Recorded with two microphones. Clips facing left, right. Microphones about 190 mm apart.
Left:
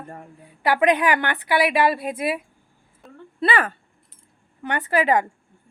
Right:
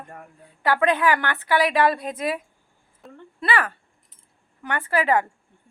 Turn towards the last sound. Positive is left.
turn(degrees=20)  # may be behind; listen again after turning